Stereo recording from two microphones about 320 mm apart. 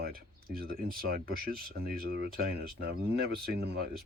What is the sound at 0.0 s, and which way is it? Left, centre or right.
Speech, right.